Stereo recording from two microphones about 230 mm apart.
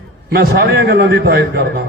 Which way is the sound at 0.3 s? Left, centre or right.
Right.